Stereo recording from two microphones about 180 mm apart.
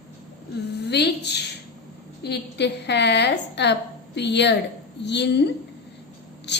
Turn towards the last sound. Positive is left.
turn(degrees=70)  # may be behind; listen again after turning